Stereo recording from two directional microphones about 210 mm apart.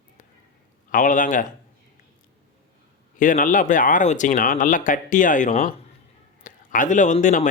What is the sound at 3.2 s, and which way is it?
Speech, 40° left (ahead or behind).